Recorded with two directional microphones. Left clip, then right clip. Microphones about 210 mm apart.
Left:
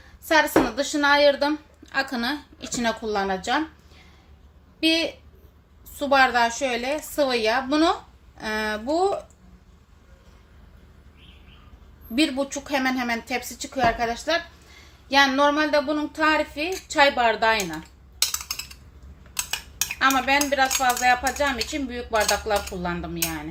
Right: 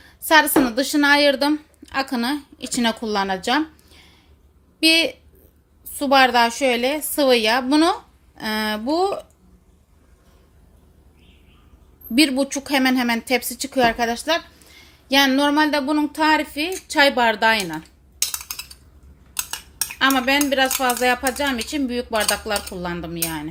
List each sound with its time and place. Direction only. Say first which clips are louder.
0.3 s a woman's voice: right 4 dB; 40° right (ahead or behind)
4.8 s a woman's voice: right 6 dB; 40° right (ahead or behind)
12.1 s a woman's voice: right 5 dB; 40° right (ahead or behind)
20.0 s speech: right 2 dB; 40° right (ahead or behind)